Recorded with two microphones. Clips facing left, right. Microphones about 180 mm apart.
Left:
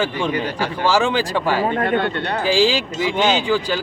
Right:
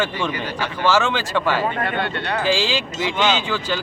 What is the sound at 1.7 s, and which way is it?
Speech, 50° left (ahead or behind).